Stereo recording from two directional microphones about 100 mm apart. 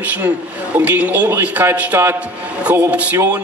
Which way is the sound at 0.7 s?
20° right (ahead or behind).